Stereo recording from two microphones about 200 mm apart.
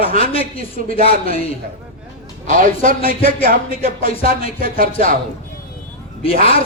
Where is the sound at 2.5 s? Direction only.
40° right (ahead or behind).